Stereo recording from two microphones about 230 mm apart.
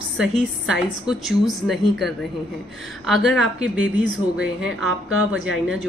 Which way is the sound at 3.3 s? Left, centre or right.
Centre.